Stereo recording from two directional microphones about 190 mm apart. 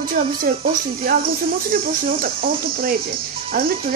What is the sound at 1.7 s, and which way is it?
A child's voice, 50° right (ahead or behind).